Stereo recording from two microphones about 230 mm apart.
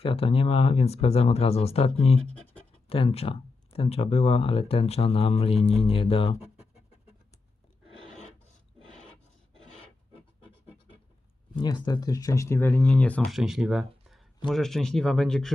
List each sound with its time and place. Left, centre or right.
0.0 s speech: left
11.5 s speech: centre